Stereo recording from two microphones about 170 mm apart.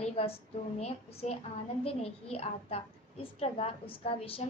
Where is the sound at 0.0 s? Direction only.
35° left (ahead or behind).